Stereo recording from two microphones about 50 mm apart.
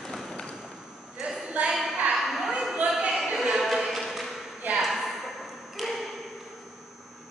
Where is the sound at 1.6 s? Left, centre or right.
Right.